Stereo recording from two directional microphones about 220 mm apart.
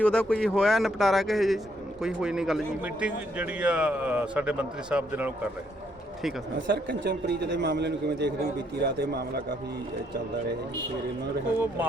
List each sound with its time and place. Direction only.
0.0 s a man's voice: 5° left (ahead or behind)
6.7 s a man's voice: 45° right (ahead or behind)
11.5 s speech: 10° right (ahead or behind)